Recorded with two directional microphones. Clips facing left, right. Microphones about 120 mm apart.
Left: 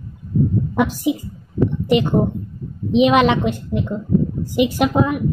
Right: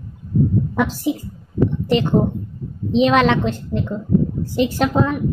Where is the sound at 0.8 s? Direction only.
15° left (ahead or behind).